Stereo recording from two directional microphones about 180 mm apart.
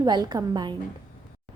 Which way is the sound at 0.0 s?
25° right (ahead or behind).